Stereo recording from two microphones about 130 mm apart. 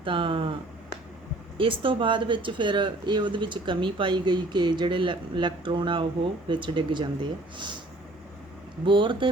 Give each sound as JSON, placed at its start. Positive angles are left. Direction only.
{"t": 0.0, "sound": "speech", "side_deg": -40}
{"t": 1.5, "sound": "speech", "side_deg": -45}
{"t": 8.8, "sound": "speech", "side_deg": -40}